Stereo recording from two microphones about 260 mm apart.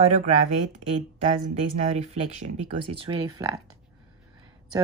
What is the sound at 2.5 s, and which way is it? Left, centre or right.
Speech, centre.